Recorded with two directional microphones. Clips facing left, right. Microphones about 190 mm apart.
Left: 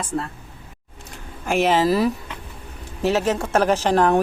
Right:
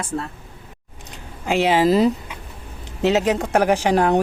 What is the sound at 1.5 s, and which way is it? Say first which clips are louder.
A woman's voice: right 1 dB; 15° right (ahead or behind).